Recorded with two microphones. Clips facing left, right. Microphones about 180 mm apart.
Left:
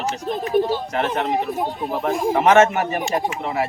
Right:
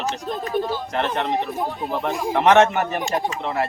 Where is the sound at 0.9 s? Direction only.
5° left (ahead or behind).